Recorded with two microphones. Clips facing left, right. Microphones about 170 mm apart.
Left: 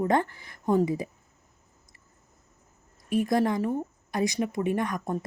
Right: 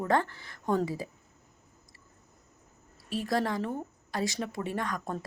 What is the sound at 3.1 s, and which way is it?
A woman's voice, 15° left (ahead or behind).